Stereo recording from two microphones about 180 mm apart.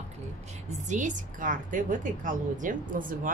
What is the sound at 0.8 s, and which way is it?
A woman's voice, 45° right (ahead or behind).